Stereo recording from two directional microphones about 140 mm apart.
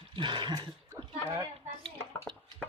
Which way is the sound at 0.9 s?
20° right (ahead or behind).